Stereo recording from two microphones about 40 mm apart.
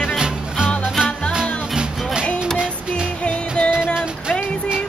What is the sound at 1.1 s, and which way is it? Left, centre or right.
Music, left.